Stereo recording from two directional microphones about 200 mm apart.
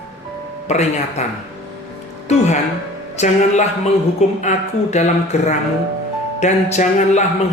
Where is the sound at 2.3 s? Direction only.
35° left (ahead or behind).